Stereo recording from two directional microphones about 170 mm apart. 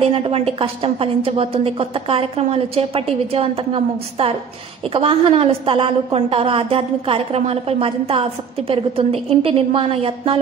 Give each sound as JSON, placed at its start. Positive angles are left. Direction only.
{"t": 0.1, "sound": "a woman's voice", "side_deg": -35}